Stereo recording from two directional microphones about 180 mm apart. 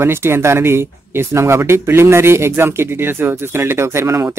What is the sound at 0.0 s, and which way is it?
Speech, 15° right (ahead or behind).